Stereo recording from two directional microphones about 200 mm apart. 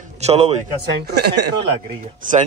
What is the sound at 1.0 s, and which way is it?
Speech, 55° right (ahead or behind).